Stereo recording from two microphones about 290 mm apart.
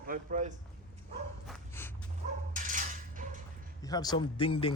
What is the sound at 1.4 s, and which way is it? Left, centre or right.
Dog, centre.